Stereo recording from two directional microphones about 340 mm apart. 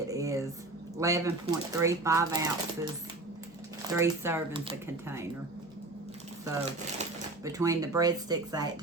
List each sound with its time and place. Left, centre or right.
0.1 s a sound: centre
0.9 s speech: centre
6.4 s speech: centre